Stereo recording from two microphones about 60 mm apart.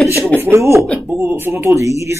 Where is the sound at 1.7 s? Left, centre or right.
Right.